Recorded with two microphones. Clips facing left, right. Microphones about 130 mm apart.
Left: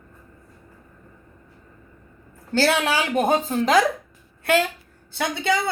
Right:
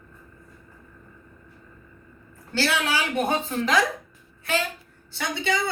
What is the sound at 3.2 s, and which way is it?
Speech, 40° left (ahead or behind).